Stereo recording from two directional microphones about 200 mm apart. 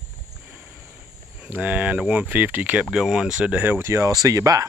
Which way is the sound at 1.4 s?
5° right (ahead or behind).